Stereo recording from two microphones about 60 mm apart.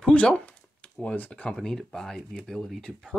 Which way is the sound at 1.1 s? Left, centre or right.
Left.